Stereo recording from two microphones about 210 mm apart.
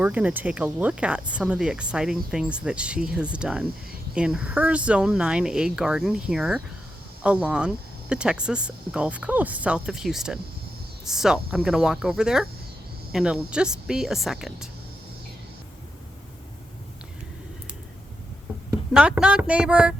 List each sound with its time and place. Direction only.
0.0 s speech: 5° right (ahead or behind)
18.9 s speech: 5° right (ahead or behind)